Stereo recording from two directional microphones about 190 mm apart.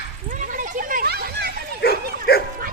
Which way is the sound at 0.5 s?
45° right (ahead or behind).